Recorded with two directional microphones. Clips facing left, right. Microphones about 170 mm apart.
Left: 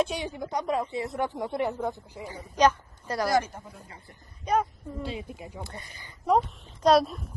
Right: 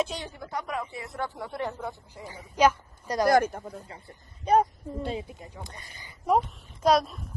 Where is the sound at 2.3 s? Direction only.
10° right (ahead or behind).